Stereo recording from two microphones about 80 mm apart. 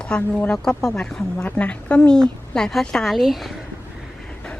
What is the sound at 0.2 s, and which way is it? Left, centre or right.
Speech, left.